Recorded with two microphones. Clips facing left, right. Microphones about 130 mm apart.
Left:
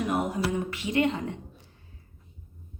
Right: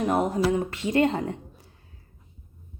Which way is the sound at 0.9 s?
40° right (ahead or behind).